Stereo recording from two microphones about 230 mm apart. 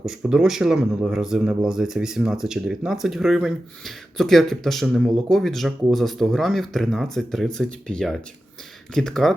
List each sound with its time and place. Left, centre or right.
0.0 s speech: centre